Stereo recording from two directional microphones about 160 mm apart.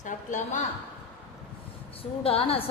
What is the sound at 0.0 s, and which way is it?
Speech, 50° left (ahead or behind).